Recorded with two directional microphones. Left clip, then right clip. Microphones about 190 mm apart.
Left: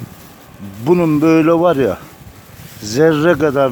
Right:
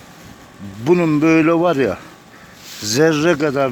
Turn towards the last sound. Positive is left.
turn(degrees=20)  # may be behind; listen again after turning